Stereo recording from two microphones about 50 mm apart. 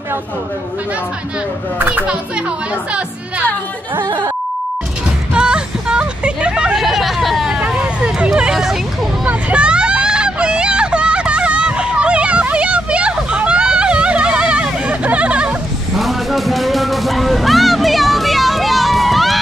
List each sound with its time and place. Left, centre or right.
1.8 s a child's voice: right
5.3 s hubbub: centre
6.8 s a sound: centre
7.6 s hubbub: right
9.3 s vehicle: right
16.0 s music: centre